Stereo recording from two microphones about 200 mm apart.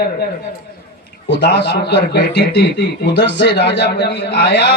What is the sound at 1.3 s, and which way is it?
A man's voice, 55° left (ahead or behind).